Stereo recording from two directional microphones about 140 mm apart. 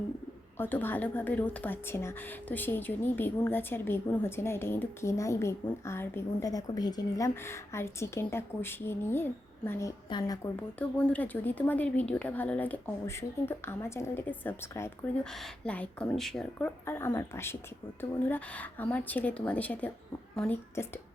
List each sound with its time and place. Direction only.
0.6 s a woman's voice: 15° left (ahead or behind)
10.1 s a woman's voice: 30° left (ahead or behind)
10.4 s a woman's voice: 10° left (ahead or behind)